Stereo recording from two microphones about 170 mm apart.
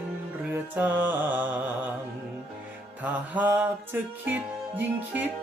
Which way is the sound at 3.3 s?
10° right (ahead or behind).